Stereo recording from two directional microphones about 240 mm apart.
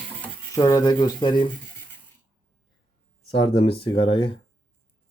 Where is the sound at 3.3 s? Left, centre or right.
Left.